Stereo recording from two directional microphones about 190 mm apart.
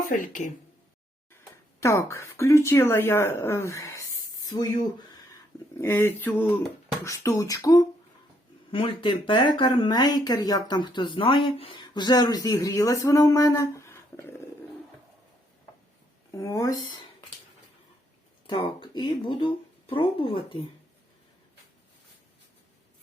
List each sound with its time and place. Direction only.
0.1 s speech: 40° left (ahead or behind)
1.8 s speech: 15° left (ahead or behind)
5.8 s speech: 10° left (ahead or behind)
16.3 s speech: 15° left (ahead or behind)
18.4 s speech: 25° left (ahead or behind)